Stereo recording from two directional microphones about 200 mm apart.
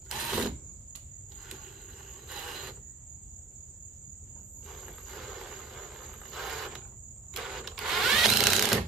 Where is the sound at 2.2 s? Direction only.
Centre (ahead or behind).